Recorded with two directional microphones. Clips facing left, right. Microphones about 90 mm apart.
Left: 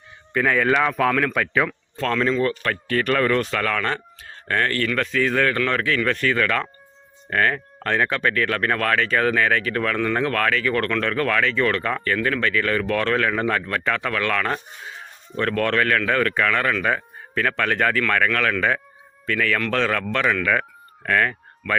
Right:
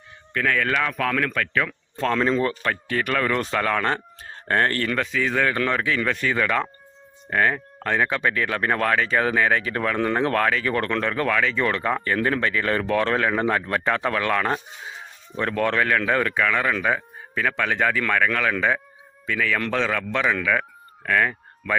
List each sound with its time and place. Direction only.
0.3 s speech: 15° left (ahead or behind)
2.0 s speech: 20° right (ahead or behind)
3.3 s speech: 20° right (ahead or behind)
4.9 s speech: 15° right (ahead or behind)